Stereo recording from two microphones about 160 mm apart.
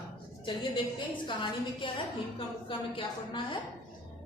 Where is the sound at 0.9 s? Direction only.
30° left (ahead or behind).